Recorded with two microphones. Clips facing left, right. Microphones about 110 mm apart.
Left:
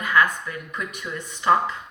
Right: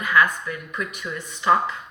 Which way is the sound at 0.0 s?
40° left (ahead or behind).